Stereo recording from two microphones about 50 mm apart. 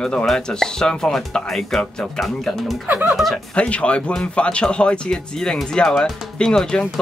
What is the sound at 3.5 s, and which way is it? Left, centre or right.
Speech, left.